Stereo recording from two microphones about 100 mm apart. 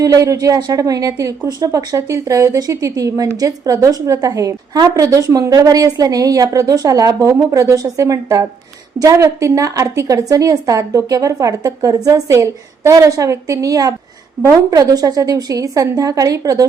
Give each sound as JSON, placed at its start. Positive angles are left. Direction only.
{"t": 0.0, "sound": "a woman's voice", "side_deg": -35}